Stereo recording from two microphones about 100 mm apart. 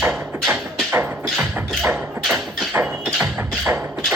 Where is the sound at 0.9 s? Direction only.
15° right (ahead or behind).